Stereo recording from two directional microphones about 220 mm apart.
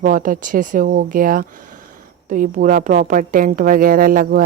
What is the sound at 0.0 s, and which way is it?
Speech, 35° right (ahead or behind).